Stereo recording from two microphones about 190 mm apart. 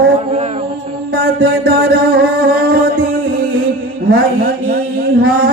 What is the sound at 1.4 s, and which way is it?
Music, 55° right (ahead or behind).